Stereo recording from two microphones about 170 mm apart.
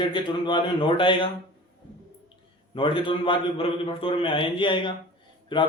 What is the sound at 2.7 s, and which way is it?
A man's voice, 30° left (ahead or behind).